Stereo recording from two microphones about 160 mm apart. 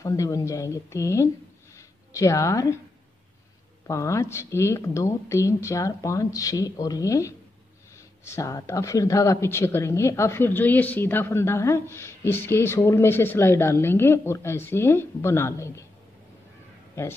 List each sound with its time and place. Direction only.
0.0 s a woman's voice: 20° left (ahead or behind)
3.8 s speech: 20° left (ahead or behind)
17.0 s speech: 15° left (ahead or behind)